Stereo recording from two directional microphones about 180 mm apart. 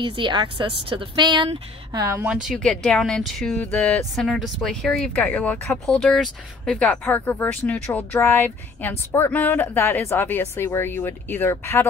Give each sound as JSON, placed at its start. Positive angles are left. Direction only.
{"t": 0.0, "sound": "speech", "side_deg": -25}
{"t": 2.0, "sound": "a woman's voice", "side_deg": -15}
{"t": 2.4, "sound": "speech", "side_deg": 0}